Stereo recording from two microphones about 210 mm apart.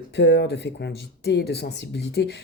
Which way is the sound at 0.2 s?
55° left (ahead or behind).